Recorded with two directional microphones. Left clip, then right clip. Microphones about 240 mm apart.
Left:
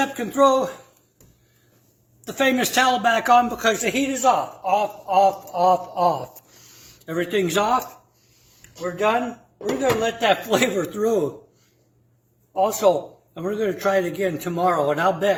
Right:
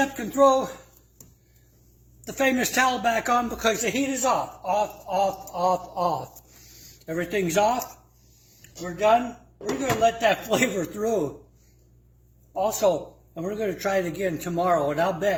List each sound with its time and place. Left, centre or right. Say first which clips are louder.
0.0 s speech: left 2 dB; centre
2.2 s speech: left 3 dB; centre
9.0 s speech: right 1 dB; centre
12.5 s speech: left 4 dB; centre